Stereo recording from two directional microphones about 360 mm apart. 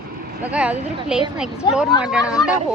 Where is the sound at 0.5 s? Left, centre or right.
Centre.